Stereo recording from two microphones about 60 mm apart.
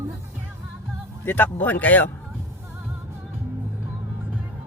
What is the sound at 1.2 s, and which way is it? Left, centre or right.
Speech, left.